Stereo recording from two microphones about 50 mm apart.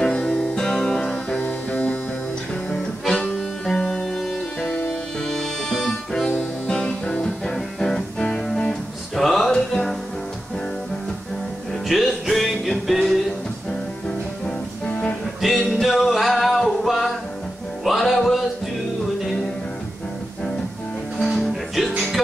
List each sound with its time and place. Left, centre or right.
0.0 s music: left
0.6 s music: centre
1.4 s music: left
3.2 s music: centre
4.6 s music: left
5.2 s music: centre
6.8 s music: left
7.2 s music: centre
11.9 s music: centre
14.4 s music: left
15.4 s music: centre
21.2 s music: centre